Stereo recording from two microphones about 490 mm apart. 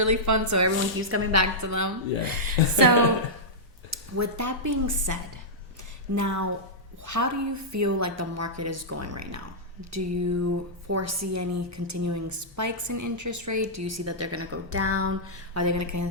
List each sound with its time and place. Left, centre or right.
0.0 s speech: right